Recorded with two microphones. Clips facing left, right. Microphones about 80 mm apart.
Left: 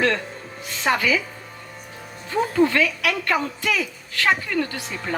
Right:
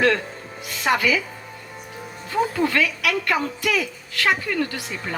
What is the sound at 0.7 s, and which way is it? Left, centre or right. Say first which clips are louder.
Speech: right 1 dB; left.